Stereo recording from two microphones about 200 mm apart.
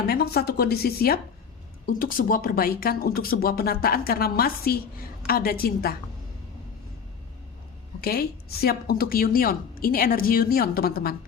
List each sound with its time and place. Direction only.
0.1 s speech: 50° left (ahead or behind)
8.0 s speech: 50° left (ahead or behind)